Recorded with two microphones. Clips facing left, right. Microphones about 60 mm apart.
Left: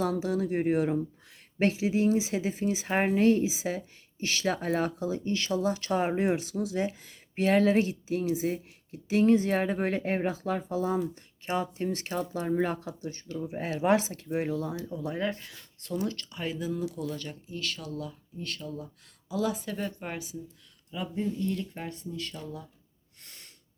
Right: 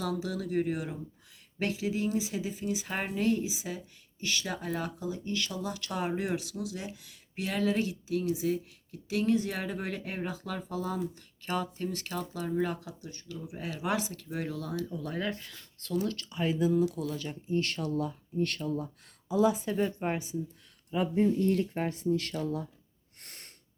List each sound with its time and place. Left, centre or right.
0.0 s speech: left
1.8 s speech: left
4.9 s speech: left
16.1 s speech: centre
17.5 s speech: right
19.3 s speech: centre
20.9 s speech: right
22.0 s speech: right